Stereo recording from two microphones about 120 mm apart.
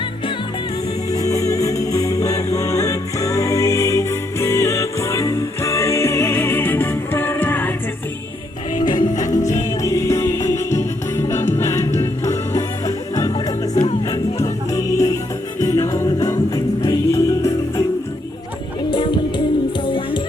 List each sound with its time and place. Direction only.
1.1 s music: 30° left (ahead or behind)
8.8 s music: 35° left (ahead or behind)
9.2 s music: 90° left
9.8 s music: 25° left (ahead or behind)
13.3 s music: 40° left (ahead or behind)
14.4 s music: 25° left (ahead or behind)
18.9 s music: 40° left (ahead or behind)